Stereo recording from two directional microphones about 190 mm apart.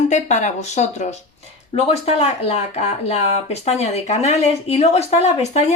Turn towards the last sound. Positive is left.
turn(degrees=35)  # may be behind; listen again after turning